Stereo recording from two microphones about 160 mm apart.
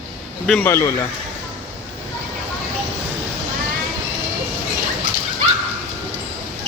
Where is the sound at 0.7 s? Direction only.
15° left (ahead or behind).